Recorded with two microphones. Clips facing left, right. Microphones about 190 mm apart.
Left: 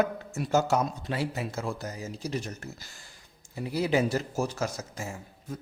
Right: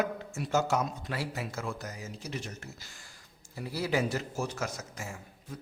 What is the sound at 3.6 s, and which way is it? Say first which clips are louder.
Speech: left 5 dB; 20° left (ahead or behind).